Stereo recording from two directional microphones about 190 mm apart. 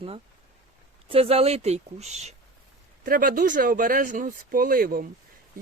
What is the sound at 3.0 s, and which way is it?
Speech, 45° right (ahead or behind).